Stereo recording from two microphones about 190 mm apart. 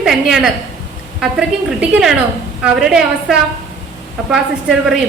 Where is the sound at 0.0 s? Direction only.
Centre (ahead or behind).